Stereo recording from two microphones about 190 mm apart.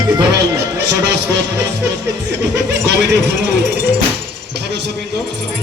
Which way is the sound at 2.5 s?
65° right (ahead or behind).